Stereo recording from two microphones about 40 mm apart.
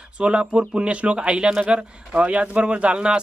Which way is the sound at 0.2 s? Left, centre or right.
Right.